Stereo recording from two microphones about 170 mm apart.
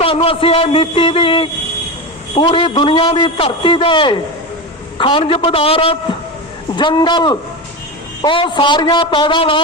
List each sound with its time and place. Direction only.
0.0 s a man's voice: 30° left (ahead or behind)